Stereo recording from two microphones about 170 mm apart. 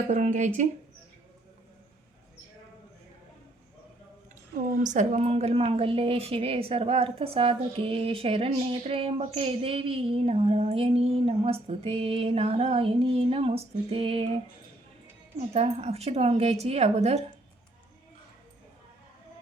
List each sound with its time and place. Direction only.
0.1 s speech: 45° right (ahead or behind)
4.8 s a woman's voice: 45° right (ahead or behind)
15.5 s a woman's voice: 35° right (ahead or behind)